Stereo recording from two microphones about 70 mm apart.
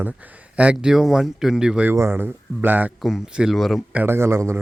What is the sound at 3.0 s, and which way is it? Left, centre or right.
Speech, centre.